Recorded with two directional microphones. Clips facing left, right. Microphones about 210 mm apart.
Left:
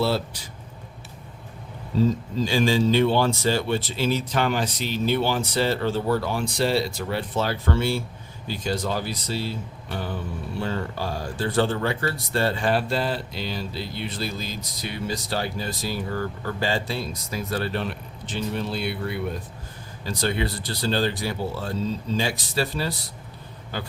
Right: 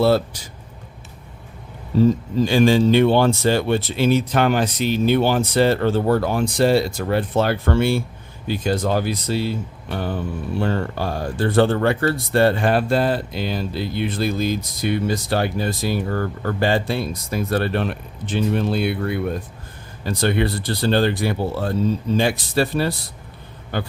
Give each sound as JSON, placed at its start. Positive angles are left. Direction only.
{"t": 2.4, "sound": "speech", "side_deg": -55}
{"t": 10.6, "sound": "speech", "side_deg": -55}